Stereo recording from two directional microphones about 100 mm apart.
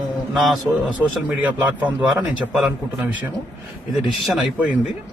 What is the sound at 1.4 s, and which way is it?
A man's voice, 15° right (ahead or behind).